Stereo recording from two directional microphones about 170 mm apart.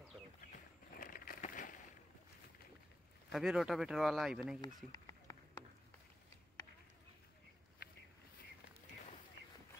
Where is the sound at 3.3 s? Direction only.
5° right (ahead or behind).